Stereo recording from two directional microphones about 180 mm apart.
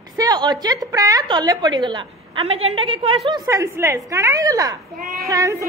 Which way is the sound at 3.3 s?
20° right (ahead or behind).